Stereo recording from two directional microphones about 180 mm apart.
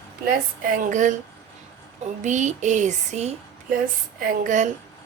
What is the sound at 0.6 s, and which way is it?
Speech, 50° right (ahead or behind).